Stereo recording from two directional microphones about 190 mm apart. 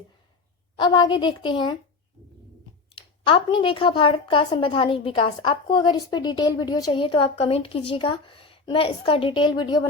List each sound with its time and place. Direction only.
0.8 s a woman's voice: 25° left (ahead or behind)
2.9 s a woman's voice: 25° left (ahead or behind)